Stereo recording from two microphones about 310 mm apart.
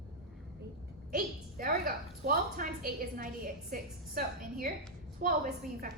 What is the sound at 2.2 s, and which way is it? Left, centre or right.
A woman's voice, right.